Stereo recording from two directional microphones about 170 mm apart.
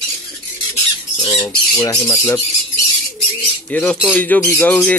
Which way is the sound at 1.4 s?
20° left (ahead or behind).